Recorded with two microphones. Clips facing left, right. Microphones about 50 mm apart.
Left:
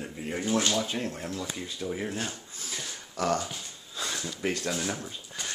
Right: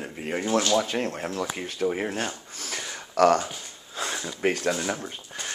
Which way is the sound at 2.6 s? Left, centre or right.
Right.